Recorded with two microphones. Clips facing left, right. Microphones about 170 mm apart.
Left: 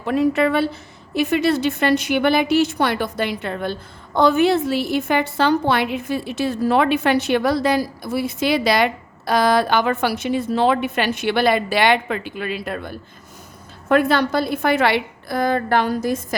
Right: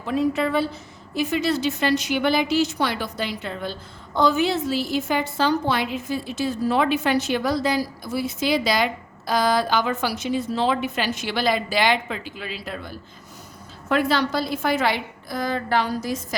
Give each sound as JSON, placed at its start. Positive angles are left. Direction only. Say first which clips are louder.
{"t": 0.0, "sound": "a woman's voice", "louder": "left 4 dB", "side_deg": 65}